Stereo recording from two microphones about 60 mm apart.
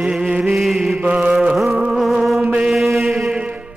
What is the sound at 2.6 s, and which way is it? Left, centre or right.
Mantra, centre.